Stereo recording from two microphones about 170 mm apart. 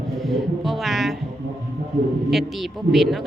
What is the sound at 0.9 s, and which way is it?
Speech, centre (ahead or behind).